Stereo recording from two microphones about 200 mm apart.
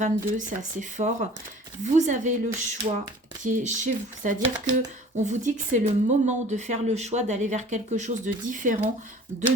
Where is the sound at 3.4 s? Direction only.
40° right (ahead or behind).